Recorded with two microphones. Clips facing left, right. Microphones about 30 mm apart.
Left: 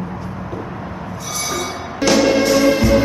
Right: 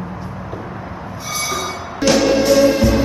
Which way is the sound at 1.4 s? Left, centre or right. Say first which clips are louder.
Right 1 dB; centre.